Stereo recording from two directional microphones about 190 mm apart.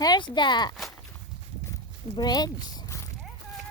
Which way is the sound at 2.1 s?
20° left (ahead or behind).